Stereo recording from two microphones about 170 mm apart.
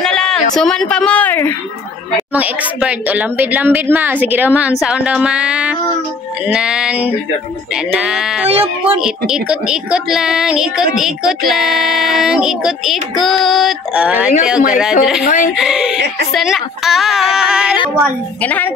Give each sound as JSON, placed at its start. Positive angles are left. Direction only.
{"t": 0.0, "sound": "a sound", "side_deg": 5}
{"t": 0.6, "sound": "a woman's voice", "side_deg": 5}
{"t": 2.1, "sound": "a woman's voice", "side_deg": -10}
{"t": 8.5, "sound": "speech", "side_deg": -35}
{"t": 9.3, "sound": "a woman's voice", "side_deg": -5}
{"t": 15.2, "sound": "speech", "side_deg": 55}
{"t": 15.5, "sound": "a woman's voice", "side_deg": -5}
{"t": 18.4, "sound": "a woman's voice", "side_deg": 10}